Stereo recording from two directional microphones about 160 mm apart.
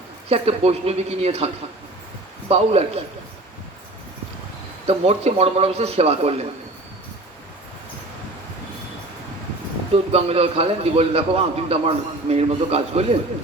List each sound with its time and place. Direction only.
0.3 s a man's voice: 40° right (ahead or behind)
2.5 s a man's voice: 40° right (ahead or behind)
4.9 s a man's voice: 40° right (ahead or behind)
9.9 s a man's voice: 40° right (ahead or behind)